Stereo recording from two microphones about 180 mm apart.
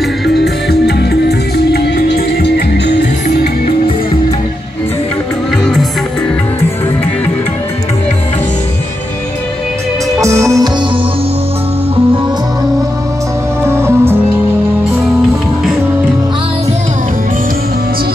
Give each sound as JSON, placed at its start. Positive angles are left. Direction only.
{"t": 0.3, "sound": "music", "side_deg": 65}
{"t": 10.2, "sound": "music", "side_deg": -15}
{"t": 13.7, "sound": "music", "side_deg": -15}